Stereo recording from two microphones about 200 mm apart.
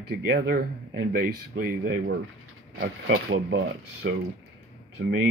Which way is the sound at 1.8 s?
65° right (ahead or behind).